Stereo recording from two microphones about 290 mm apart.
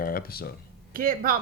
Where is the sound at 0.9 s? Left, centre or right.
Right.